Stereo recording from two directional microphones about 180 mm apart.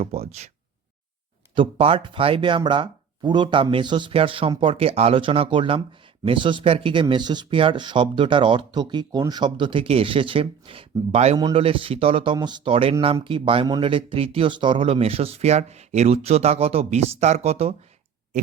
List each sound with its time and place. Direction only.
0.0 s speech: 35° right (ahead or behind)
1.5 s speech: 30° right (ahead or behind)
11.3 s speech: 25° right (ahead or behind)